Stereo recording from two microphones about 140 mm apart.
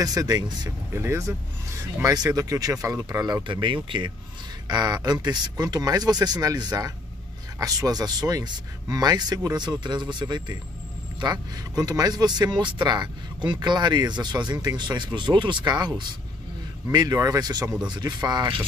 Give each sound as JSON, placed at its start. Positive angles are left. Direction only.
{"t": 0.0, "sound": "speech", "side_deg": -25}
{"t": 16.9, "sound": "speech", "side_deg": -25}